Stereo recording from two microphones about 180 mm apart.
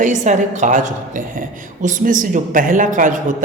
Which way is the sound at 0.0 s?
45° right (ahead or behind).